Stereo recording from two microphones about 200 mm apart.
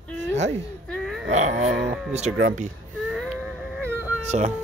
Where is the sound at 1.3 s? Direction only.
35° right (ahead or behind).